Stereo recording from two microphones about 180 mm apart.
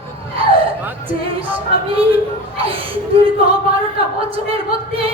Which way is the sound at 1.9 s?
30° right (ahead or behind).